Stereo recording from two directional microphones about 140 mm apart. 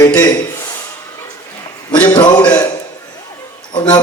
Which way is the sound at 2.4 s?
10° left (ahead or behind).